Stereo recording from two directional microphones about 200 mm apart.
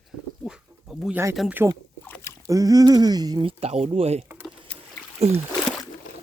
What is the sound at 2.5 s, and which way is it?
Speech, 15° right (ahead or behind).